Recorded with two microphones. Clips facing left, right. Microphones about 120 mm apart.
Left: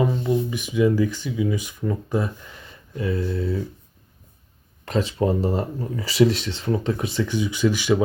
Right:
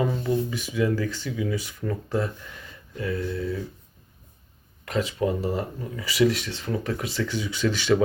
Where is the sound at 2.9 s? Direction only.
25° left (ahead or behind).